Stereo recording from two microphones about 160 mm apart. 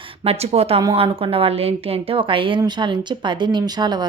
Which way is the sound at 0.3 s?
40° right (ahead or behind).